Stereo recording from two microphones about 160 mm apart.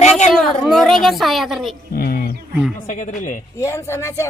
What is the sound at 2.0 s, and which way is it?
Speech, 75° left (ahead or behind).